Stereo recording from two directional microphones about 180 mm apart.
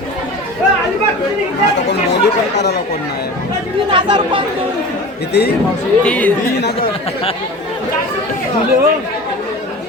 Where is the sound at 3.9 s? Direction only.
25° right (ahead or behind).